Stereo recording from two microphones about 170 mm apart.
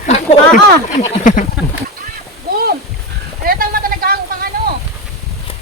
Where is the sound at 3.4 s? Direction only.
60° right (ahead or behind).